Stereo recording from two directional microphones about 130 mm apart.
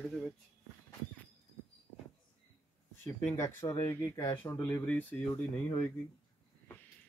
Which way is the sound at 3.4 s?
20° left (ahead or behind).